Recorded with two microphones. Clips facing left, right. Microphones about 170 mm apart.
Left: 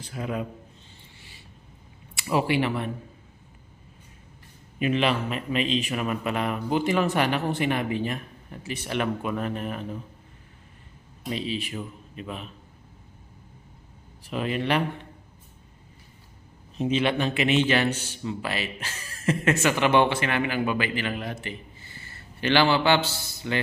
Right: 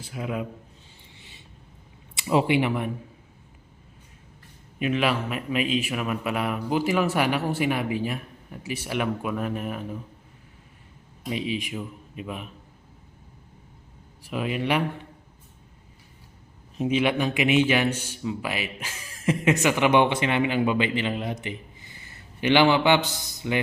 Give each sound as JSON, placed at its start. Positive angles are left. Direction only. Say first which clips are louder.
{"t": 0.0, "sound": "a man's voice", "louder": "even", "side_deg": -5}
{"t": 2.3, "sound": "speech", "louder": "right 2 dB", "side_deg": -20}
{"t": 4.8, "sound": "speech", "louder": "even", "side_deg": 0}
{"t": 11.3, "sound": "a man's voice", "louder": "right 1 dB", "side_deg": -15}
{"t": 14.3, "sound": "speech", "louder": "even", "side_deg": -5}
{"t": 16.7, "sound": "a man's voice", "louder": "right 1 dB", "side_deg": -10}